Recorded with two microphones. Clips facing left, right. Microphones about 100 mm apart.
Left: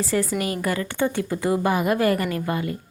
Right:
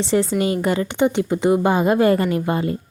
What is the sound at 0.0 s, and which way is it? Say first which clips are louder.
A woman's voice: right 5 dB; 25° right (ahead or behind).